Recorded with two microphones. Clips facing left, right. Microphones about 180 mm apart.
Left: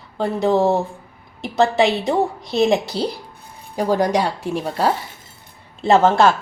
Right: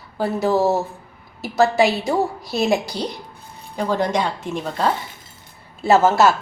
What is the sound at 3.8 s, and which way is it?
Speech, 40° left (ahead or behind).